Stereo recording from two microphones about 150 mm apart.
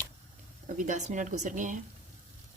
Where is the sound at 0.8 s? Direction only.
55° right (ahead or behind).